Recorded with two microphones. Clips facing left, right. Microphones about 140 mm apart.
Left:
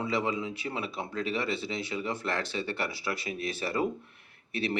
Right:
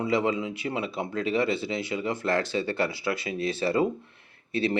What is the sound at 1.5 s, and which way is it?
Speech, 30° left (ahead or behind).